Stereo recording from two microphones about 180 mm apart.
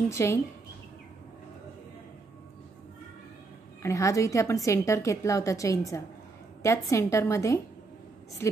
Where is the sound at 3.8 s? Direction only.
15° left (ahead or behind).